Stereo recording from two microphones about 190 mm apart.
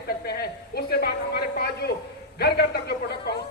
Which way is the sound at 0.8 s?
55° left (ahead or behind).